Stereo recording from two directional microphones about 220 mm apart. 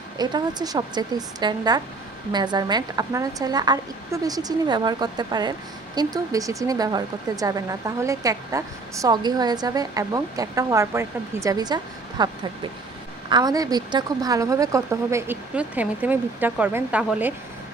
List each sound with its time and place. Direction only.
0.2 s a woman's voice: 20° right (ahead or behind)
13.3 s speech: 20° right (ahead or behind)